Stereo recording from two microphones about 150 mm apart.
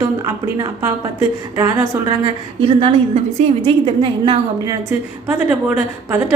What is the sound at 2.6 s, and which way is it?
A woman's voice, 40° right (ahead or behind).